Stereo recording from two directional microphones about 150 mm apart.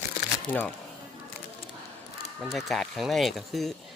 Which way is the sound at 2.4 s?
Centre (ahead or behind).